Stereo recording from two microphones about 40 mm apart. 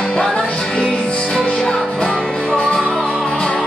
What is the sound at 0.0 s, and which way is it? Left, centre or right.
Music, left.